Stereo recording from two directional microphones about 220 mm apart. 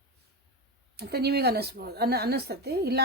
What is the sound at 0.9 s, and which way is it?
A woman's voice, 45° right (ahead or behind).